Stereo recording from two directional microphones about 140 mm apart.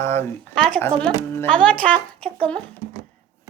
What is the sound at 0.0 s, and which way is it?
Speech, 15° left (ahead or behind).